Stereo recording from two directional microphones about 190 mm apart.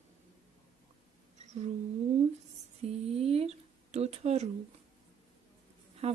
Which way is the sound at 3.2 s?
30° right (ahead or behind).